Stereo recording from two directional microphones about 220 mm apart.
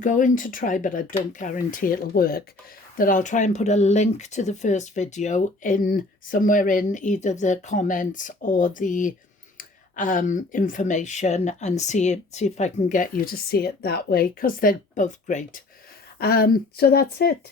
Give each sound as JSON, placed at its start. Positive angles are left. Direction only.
{"t": 0.0, "sound": "speech", "side_deg": 35}
{"t": 16.1, "sound": "speech", "side_deg": 45}